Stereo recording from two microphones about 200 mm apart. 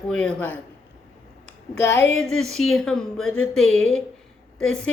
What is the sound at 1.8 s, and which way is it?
Speech, 65° left (ahead or behind).